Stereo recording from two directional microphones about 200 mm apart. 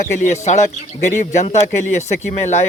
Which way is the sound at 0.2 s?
35° left (ahead or behind).